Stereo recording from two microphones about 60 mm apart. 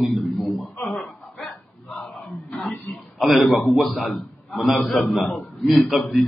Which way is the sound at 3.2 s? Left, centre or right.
Centre.